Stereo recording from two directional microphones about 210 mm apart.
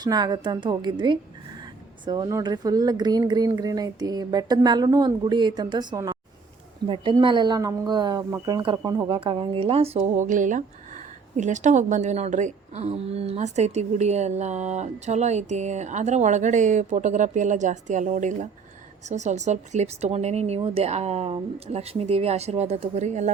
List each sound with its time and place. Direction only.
0.0 s a woman's voice: 20° right (ahead or behind)